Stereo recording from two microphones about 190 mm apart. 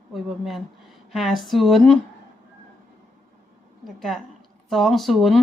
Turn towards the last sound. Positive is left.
turn(degrees=0)  # may be behind; listen again after turning